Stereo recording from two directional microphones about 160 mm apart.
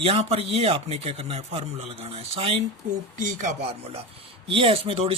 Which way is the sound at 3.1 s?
50° right (ahead or behind).